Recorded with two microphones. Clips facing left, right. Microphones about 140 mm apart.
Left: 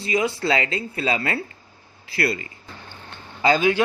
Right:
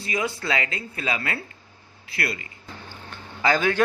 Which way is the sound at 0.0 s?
25° left (ahead or behind).